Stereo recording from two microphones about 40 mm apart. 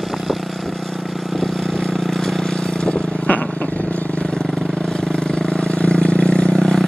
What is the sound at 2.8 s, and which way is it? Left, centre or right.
Vehicle, left.